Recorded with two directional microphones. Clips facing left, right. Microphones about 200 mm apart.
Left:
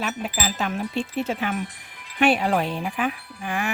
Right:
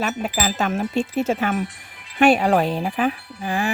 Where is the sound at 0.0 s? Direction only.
40° right (ahead or behind).